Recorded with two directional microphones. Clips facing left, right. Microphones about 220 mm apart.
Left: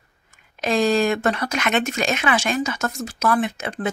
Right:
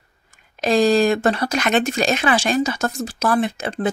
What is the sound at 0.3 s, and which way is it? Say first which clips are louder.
Speech: right 4 dB; 35° right (ahead or behind).